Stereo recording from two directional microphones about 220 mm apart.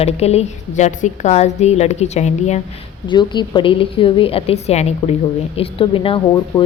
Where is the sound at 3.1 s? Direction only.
20° left (ahead or behind).